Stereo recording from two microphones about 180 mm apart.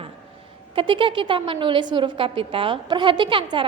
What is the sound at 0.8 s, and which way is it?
A woman's voice, 30° right (ahead or behind).